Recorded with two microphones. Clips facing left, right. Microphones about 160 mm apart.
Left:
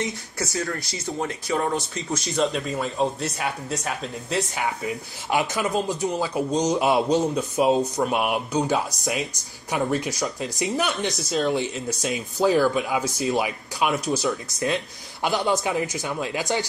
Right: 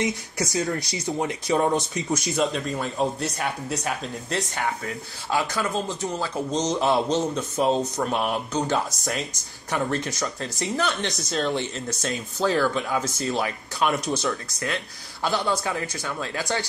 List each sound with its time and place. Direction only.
0.0 s speech: 20° right (ahead or behind)
2.1 s speech: centre (ahead or behind)
4.8 s speech: 15° left (ahead or behind)
10.9 s speech: centre (ahead or behind)
15.2 s speech: 15° left (ahead or behind)